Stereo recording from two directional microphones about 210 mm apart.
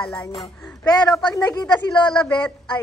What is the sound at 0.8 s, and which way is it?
A woman's voice, 20° left (ahead or behind).